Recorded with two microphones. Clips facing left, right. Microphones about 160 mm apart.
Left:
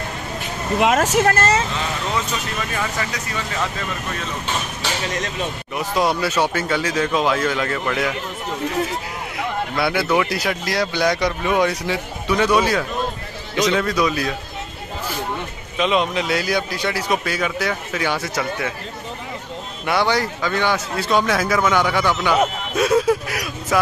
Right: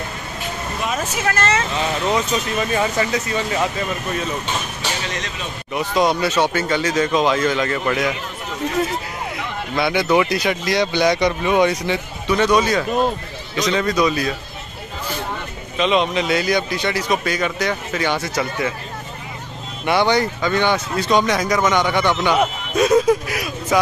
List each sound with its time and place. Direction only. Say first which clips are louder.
0.7 s speech: left 9 dB; 90° left
1.1 s speech: left 4 dB; 45° left (ahead or behind)
2.7 s speech: right 7 dB; 25° right (ahead or behind)
5.8 s speech: right 2 dB; 5° left (ahead or behind)
9.8 s speech: right 3 dB; centre (ahead or behind)
15.8 s speech: right 1 dB; 5° left (ahead or behind)
19.9 s speech: right 3 dB; centre (ahead or behind)